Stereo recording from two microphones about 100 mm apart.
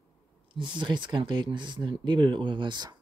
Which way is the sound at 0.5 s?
50° right (ahead or behind).